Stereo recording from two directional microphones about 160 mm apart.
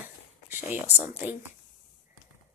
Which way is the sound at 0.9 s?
10° right (ahead or behind).